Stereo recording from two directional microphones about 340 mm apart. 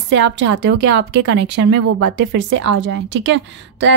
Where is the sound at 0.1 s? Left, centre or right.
Right.